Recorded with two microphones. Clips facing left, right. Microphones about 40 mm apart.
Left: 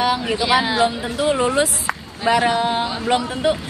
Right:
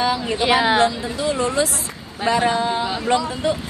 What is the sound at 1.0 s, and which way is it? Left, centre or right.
Speech, left.